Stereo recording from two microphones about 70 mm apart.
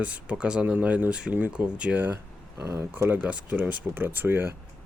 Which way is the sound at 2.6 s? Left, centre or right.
Right.